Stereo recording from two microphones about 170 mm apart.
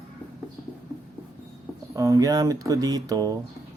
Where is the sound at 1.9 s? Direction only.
20° right (ahead or behind).